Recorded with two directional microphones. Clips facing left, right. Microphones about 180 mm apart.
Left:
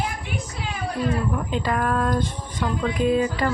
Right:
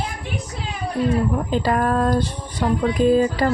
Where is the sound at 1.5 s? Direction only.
35° right (ahead or behind).